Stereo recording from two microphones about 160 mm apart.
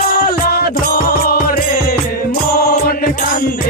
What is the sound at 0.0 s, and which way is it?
Music, 65° left (ahead or behind).